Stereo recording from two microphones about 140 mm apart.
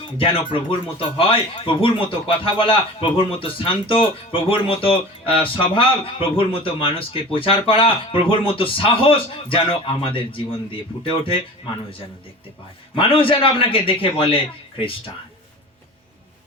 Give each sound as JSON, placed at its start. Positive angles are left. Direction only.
{"t": 0.2, "sound": "speech", "side_deg": 40}
{"t": 13.0, "sound": "speech", "side_deg": 40}